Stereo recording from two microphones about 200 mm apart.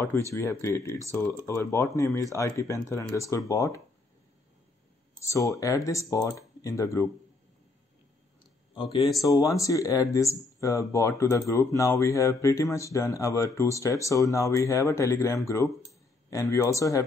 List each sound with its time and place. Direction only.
0.3 s speech: 15° left (ahead or behind)
5.2 s speech: 15° left (ahead or behind)
8.7 s speech: 25° left (ahead or behind)